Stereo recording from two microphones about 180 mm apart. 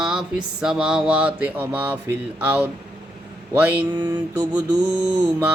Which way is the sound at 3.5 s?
10° right (ahead or behind).